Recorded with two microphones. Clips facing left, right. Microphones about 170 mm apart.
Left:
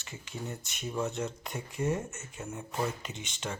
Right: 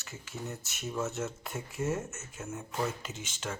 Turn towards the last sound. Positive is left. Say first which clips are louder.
# even
turn(degrees=0)  # may be behind; listen again after turning